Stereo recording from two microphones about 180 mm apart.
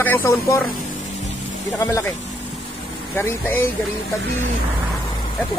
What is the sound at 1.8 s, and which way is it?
Speech, 15° left (ahead or behind).